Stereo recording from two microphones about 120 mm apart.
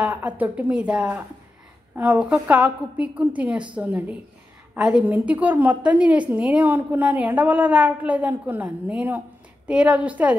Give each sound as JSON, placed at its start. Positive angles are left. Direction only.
{"t": 0.0, "sound": "a woman's voice", "side_deg": -10}